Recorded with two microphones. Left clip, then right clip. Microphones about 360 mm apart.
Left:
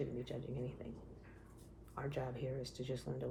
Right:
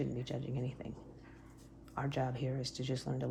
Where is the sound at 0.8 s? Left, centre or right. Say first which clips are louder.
Right 3 dB; right.